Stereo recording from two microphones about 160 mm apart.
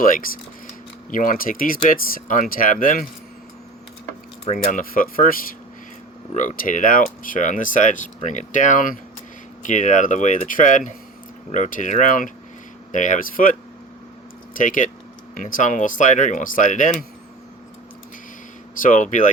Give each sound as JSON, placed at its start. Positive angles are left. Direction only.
{"t": 1.1, "sound": "speech", "side_deg": 60}
{"t": 4.7, "sound": "speech", "side_deg": 60}
{"t": 18.8, "sound": "speech", "side_deg": 55}